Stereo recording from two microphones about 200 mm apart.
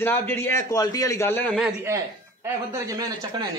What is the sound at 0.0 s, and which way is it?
A man's voice, 10° left (ahead or behind).